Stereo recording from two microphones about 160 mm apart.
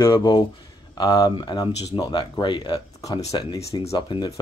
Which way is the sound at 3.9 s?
30° left (ahead or behind).